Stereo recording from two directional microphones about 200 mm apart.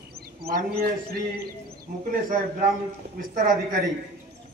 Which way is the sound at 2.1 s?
45° right (ahead or behind).